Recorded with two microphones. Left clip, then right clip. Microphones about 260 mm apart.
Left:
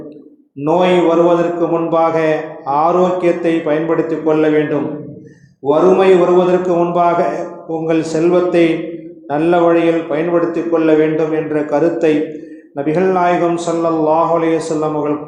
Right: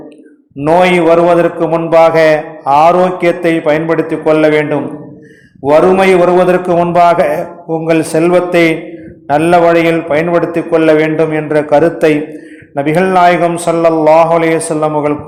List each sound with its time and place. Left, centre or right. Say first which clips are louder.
0.6 s mantra: right 4 dB; right